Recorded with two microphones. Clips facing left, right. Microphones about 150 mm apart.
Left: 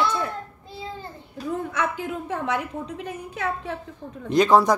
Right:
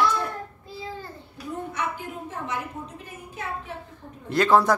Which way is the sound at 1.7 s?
85° left.